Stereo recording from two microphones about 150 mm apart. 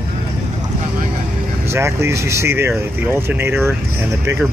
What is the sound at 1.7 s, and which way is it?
Speech, 15° right (ahead or behind).